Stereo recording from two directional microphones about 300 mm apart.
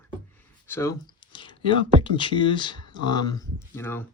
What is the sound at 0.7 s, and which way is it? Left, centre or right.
Speech, centre.